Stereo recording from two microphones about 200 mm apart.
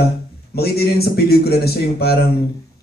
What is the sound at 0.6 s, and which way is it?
Speech, 50° left (ahead or behind).